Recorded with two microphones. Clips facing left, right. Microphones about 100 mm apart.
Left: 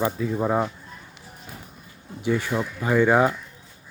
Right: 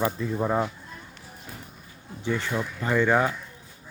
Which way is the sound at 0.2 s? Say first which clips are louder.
Left 2 dB; 5° left (ahead or behind).